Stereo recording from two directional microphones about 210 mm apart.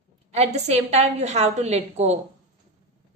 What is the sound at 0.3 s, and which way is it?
A woman's voice, 30° right (ahead or behind).